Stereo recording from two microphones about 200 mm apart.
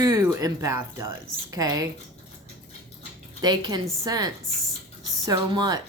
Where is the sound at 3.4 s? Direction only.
20° right (ahead or behind).